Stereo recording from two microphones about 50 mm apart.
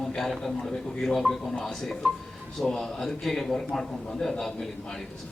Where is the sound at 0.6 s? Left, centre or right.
Centre.